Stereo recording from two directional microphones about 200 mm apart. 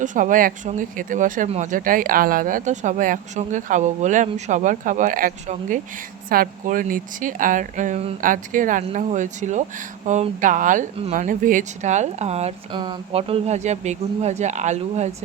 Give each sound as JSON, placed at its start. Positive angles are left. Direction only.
{"t": 0.0, "sound": "speech", "side_deg": -40}